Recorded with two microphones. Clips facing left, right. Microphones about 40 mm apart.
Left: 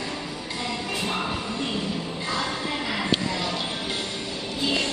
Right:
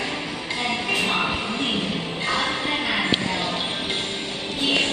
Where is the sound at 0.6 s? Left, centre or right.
Right.